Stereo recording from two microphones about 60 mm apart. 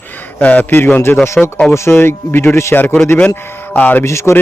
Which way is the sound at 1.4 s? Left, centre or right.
Centre.